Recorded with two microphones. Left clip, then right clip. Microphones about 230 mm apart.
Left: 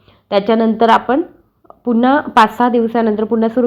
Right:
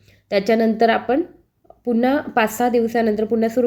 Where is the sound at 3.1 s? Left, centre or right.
Left.